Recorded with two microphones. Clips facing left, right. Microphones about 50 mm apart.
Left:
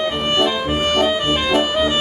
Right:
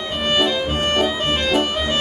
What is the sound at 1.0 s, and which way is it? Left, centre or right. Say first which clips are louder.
Music: left 2 dB; centre.